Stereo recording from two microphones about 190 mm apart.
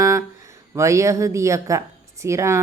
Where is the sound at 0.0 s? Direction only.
15° right (ahead or behind).